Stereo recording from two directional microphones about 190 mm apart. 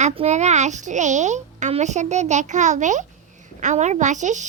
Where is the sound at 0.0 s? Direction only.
35° right (ahead or behind).